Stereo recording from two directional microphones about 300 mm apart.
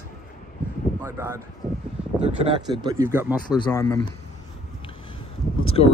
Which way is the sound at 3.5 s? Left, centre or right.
Centre.